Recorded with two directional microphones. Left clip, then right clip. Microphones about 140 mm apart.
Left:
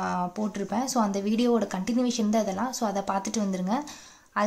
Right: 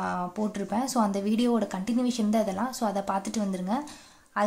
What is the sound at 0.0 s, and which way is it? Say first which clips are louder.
A woman's voice: left 1 dB; 10° left (ahead or behind).